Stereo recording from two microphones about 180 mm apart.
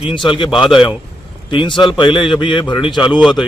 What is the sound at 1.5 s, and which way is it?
Speech, 25° left (ahead or behind).